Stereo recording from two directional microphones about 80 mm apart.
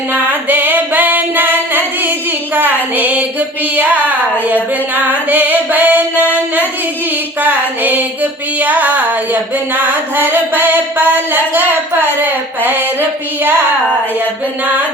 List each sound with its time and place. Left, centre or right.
0.1 s singing: right
2.6 s female singing: right
3.8 s music: centre